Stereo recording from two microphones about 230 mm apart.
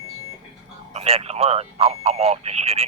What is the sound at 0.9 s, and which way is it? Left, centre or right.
Speech, right.